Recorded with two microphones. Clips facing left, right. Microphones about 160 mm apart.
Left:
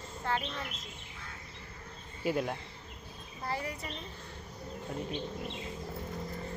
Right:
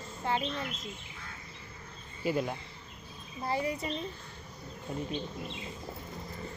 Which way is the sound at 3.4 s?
20° right (ahead or behind).